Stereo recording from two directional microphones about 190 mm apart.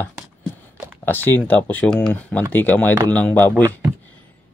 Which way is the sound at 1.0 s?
10° left (ahead or behind).